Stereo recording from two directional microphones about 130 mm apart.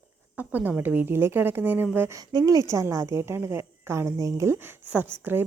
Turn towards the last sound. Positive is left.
turn(degrees=-15)  # may be behind; listen again after turning